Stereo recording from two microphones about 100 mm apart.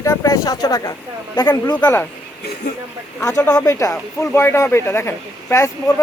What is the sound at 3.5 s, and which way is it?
Speech, 35° left (ahead or behind).